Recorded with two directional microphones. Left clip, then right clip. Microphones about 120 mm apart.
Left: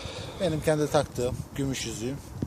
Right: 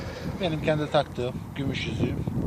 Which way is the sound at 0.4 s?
90° left.